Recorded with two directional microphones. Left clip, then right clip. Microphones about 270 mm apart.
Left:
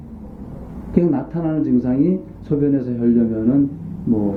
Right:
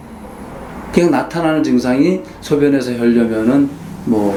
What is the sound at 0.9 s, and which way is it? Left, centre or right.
Speech, centre.